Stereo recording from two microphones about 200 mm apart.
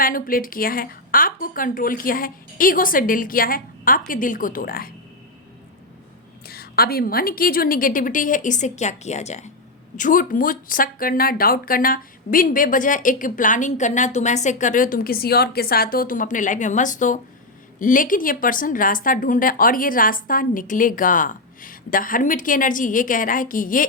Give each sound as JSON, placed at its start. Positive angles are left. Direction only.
{"t": 0.0, "sound": "speech", "side_deg": 45}
{"t": 6.5, "sound": "speech", "side_deg": 50}